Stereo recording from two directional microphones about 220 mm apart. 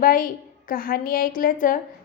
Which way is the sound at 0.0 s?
40° left (ahead or behind).